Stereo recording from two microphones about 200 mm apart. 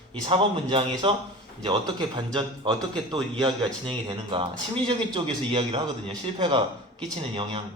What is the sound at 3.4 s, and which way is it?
A man's voice, 20° right (ahead or behind).